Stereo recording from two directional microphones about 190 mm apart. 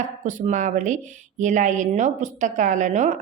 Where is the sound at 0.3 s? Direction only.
40° right (ahead or behind).